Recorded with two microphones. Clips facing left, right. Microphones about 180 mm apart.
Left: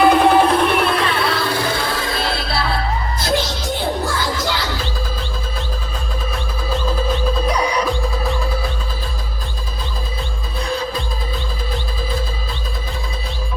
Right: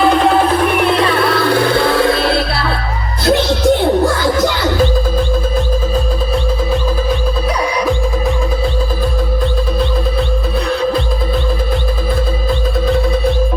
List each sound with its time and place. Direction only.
0.0 s music: centre (ahead or behind)
1.2 s music: 60° right (ahead or behind)